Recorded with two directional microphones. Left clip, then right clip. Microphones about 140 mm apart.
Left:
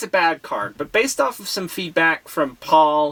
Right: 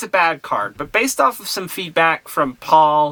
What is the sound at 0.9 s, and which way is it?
Speech, 35° right (ahead or behind).